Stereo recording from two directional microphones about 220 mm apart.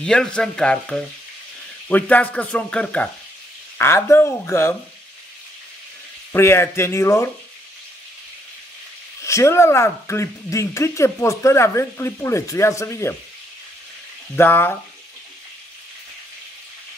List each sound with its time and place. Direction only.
0.0 s speech: 5° left (ahead or behind)
6.3 s speech: 10° left (ahead or behind)
9.2 s speech: 15° left (ahead or behind)
14.3 s speech: 10° left (ahead or behind)